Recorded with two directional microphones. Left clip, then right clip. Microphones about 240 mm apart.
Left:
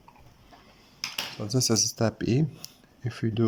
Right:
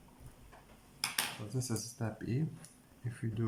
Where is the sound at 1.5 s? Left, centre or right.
Left.